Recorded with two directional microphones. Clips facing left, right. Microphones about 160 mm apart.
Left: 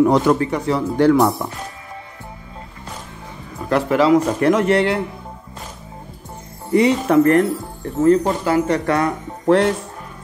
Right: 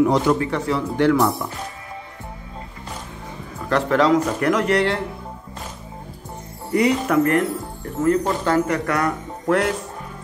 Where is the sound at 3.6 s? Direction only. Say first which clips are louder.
Left 2 dB; 10° left (ahead or behind).